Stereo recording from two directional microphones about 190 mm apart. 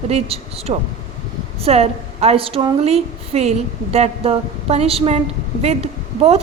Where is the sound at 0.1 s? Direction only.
30° right (ahead or behind).